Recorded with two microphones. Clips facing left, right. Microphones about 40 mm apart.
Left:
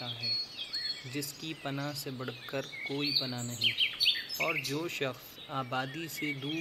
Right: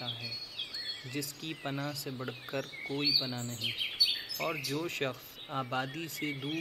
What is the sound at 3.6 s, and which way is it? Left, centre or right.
Bird, left.